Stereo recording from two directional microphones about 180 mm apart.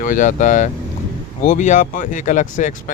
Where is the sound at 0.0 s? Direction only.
45° left (ahead or behind).